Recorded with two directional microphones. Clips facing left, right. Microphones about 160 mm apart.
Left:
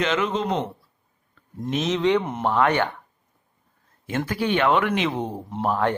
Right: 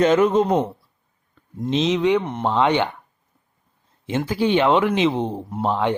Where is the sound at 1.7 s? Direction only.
15° right (ahead or behind).